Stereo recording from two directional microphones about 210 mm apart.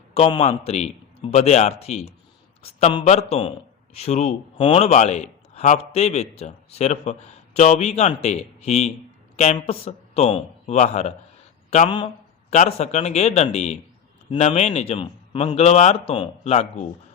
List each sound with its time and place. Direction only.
0.1 s a man's voice: 25° left (ahead or behind)